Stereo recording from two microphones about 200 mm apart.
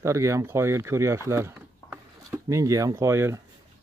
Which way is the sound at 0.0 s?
15° right (ahead or behind).